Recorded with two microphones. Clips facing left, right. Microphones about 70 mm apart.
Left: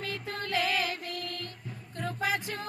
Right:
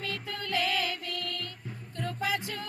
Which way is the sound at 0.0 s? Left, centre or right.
Left.